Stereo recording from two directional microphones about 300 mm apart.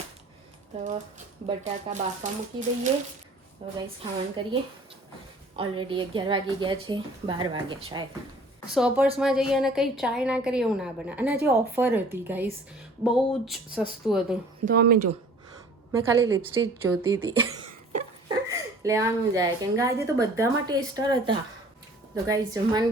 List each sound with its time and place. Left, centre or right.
1.5 s a woman's voice: right
5.5 s a woman's voice: centre
8.7 s a woman's voice: centre
14.6 s speech: right
15.9 s a woman's voice: centre